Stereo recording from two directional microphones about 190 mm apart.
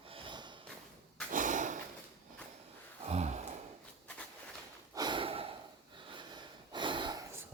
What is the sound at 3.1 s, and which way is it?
Gasp, 35° right (ahead or behind).